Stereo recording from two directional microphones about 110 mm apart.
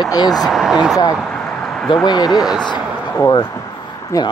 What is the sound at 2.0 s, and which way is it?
Speech, 40° left (ahead or behind).